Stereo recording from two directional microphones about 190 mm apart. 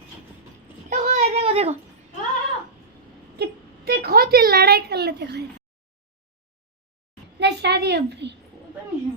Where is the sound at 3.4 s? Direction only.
55° right (ahead or behind).